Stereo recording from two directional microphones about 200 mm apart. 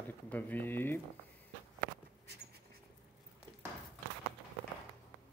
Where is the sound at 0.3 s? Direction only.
10° left (ahead or behind).